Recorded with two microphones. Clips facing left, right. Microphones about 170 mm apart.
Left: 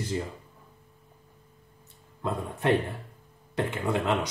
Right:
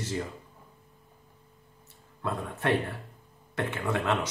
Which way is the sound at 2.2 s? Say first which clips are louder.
Left 2 dB; 15° left (ahead or behind).